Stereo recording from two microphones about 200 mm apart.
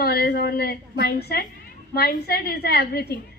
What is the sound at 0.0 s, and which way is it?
A woman's voice, 50° left (ahead or behind).